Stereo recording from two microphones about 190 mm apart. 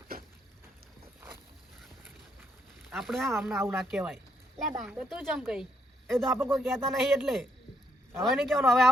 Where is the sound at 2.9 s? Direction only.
Centre (ahead or behind).